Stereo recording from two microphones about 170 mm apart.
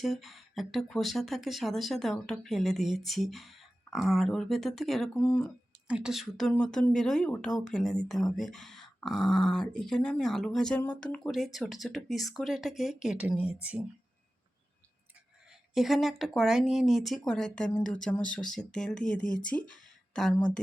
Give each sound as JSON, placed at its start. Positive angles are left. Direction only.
{"t": 0.0, "sound": "speech", "side_deg": 0}
{"t": 5.9, "sound": "speech", "side_deg": -5}
{"t": 15.7, "sound": "speech", "side_deg": 0}